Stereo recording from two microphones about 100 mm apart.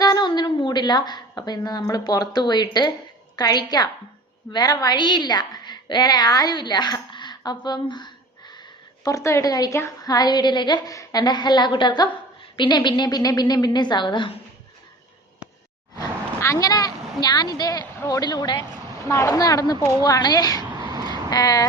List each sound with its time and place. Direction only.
0.0 s a woman's voice: 45° left (ahead or behind)
9.0 s a woman's voice: 30° left (ahead or behind); by 14.3 s 50° left (ahead or behind)
16.0 s a sound: 35° left (ahead or behind)
18.0 s a woman's voice: 40° left (ahead or behind)
19.0 s a woman's voice: 30° left (ahead or behind)
20.8 s a sound: 40° right (ahead or behind)
21.1 s vehicle: 40° left (ahead or behind)